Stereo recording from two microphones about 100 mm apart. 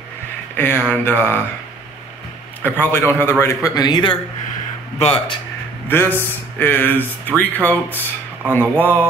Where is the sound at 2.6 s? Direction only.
20° left (ahead or behind).